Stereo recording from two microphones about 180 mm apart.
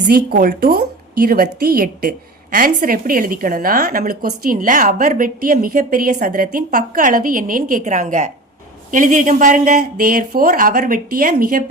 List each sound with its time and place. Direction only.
0.1 s a woman's voice: 50° right (ahead or behind)